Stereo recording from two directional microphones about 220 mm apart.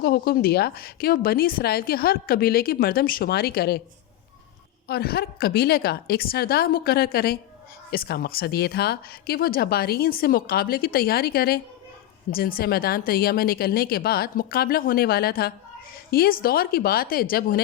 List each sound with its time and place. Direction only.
0.0 s speech: 45° left (ahead or behind)
4.9 s speech: 45° left (ahead or behind)